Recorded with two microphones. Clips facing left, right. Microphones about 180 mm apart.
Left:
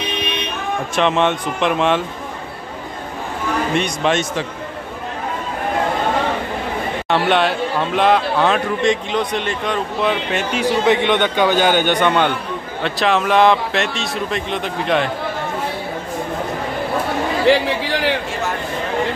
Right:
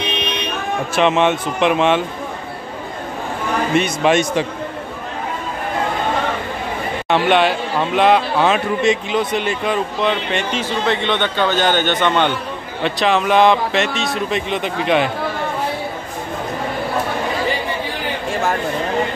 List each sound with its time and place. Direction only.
0.9 s speech: 5° right (ahead or behind)
3.7 s speech: 5° right (ahead or behind)
7.1 s speech: centre (ahead or behind)
12.8 s speech: centre (ahead or behind)
17.5 s a man's voice: 90° left